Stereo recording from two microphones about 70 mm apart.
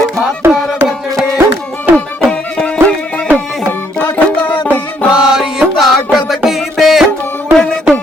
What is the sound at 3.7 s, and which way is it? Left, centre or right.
Music, left.